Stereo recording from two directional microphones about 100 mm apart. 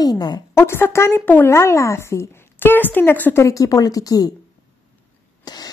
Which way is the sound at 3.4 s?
35° left (ahead or behind).